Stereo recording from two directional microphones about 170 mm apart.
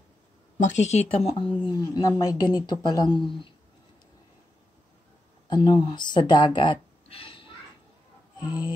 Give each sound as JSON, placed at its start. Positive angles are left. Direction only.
{"t": 0.6, "sound": "a woman's voice", "side_deg": 45}
{"t": 5.5, "sound": "speech", "side_deg": 30}